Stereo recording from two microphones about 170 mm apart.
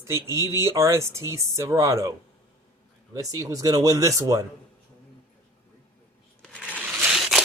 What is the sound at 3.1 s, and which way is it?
Speech, 20° right (ahead or behind).